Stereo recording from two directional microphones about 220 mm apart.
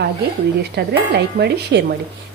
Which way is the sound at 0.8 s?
50° right (ahead or behind).